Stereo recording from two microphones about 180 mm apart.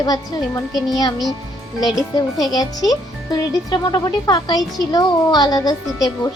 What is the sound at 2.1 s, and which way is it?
Speech, 20° left (ahead or behind).